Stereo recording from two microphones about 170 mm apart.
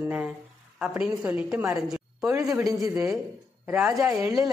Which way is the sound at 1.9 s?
5° right (ahead or behind).